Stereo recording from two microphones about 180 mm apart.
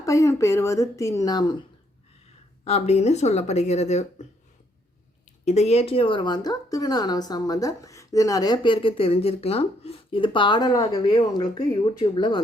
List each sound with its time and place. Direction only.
0.0 s a woman's voice: 15° left (ahead or behind)
2.6 s speech: 35° left (ahead or behind)
5.2 s speech: 40° left (ahead or behind)